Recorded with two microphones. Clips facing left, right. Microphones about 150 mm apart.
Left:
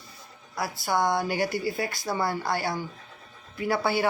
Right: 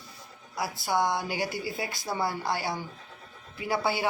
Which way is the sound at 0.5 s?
50° left (ahead or behind).